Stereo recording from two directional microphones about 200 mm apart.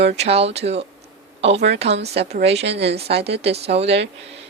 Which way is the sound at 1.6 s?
55° right (ahead or behind).